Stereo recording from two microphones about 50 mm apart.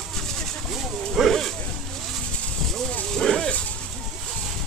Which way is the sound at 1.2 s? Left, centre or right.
Centre.